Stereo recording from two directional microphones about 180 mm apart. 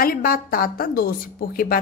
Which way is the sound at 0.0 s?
55° left (ahead or behind).